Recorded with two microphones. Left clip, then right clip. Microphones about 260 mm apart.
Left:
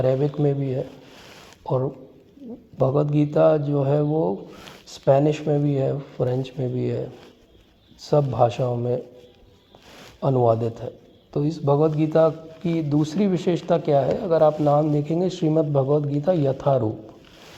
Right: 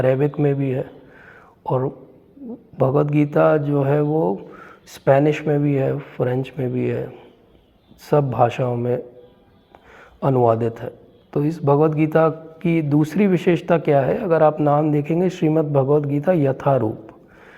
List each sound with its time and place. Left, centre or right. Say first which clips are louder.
0.0 s a man's voice: right 3 dB; right
10.2 s a man's voice: right 3 dB; right